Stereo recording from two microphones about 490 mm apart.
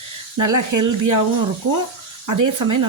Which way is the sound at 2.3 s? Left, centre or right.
Right.